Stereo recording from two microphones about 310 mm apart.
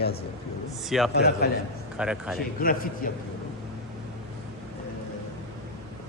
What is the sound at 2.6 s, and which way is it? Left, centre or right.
Speech, left.